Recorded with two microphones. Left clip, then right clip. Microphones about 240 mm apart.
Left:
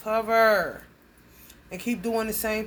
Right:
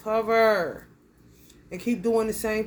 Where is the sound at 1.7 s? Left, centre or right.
Centre.